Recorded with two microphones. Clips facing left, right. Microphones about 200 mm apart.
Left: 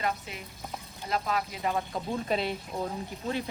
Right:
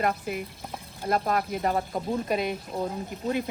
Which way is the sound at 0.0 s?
55° right (ahead or behind).